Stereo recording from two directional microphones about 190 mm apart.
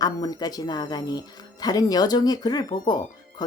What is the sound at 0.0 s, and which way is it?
Speech, 20° left (ahead or behind).